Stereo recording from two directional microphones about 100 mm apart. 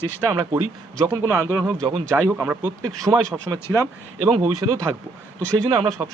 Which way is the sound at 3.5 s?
30° right (ahead or behind).